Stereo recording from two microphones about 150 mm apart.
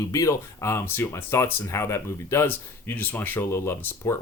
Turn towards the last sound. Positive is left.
turn(degrees=15)  # may be behind; listen again after turning